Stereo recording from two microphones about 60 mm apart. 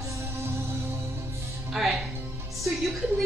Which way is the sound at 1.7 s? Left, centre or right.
Centre.